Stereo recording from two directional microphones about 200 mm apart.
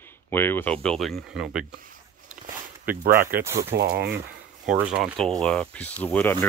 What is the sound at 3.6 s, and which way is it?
Speech, 50° right (ahead or behind).